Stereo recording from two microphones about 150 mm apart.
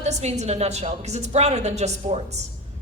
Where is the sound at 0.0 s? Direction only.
45° right (ahead or behind).